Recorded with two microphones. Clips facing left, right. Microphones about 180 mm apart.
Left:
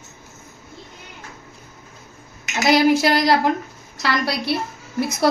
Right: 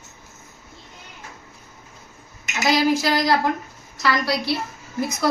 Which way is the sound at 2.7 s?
65° left (ahead or behind).